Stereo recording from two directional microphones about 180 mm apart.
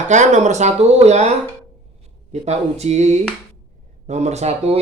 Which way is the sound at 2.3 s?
35° right (ahead or behind).